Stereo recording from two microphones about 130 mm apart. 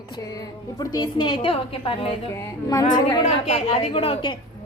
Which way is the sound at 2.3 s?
25° left (ahead or behind).